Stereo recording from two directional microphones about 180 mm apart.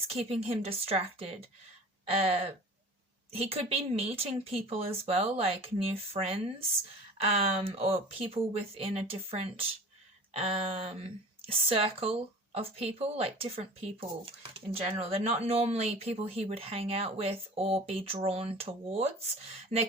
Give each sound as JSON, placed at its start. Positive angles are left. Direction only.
{"t": 0.1, "sound": "speech", "side_deg": -35}